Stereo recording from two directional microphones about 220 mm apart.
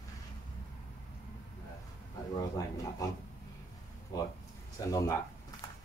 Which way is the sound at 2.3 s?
15° left (ahead or behind).